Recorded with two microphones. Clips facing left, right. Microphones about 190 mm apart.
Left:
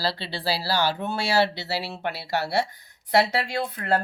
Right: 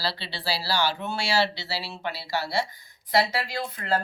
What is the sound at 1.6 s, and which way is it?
Speech, 60° left (ahead or behind).